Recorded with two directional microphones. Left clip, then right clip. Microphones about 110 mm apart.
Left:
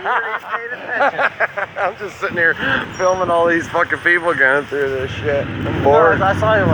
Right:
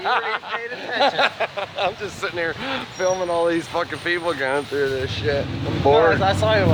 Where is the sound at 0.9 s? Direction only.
30° right (ahead or behind).